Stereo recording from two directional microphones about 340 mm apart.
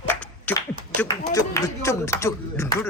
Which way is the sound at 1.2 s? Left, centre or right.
Centre.